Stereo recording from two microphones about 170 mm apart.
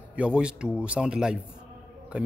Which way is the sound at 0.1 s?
5° right (ahead or behind).